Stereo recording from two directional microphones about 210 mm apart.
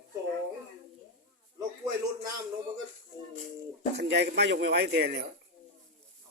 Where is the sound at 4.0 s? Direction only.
50° right (ahead or behind).